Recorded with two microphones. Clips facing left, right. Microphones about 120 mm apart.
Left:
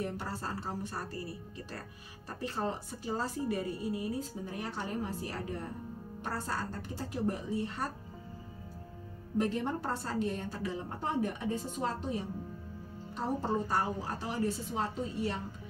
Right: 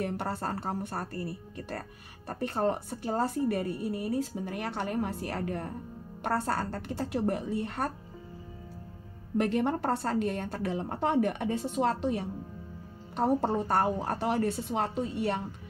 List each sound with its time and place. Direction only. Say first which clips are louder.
0.0 s speech: right 5 dB; 60° right (ahead or behind)
9.4 s a woman's voice: right 5 dB; 65° right (ahead or behind)